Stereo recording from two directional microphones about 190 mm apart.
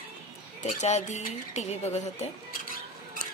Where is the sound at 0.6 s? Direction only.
35° left (ahead or behind).